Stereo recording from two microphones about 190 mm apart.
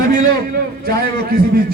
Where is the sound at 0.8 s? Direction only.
55° right (ahead or behind).